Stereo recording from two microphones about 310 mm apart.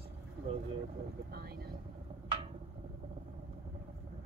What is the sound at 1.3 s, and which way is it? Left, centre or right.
Speech, right.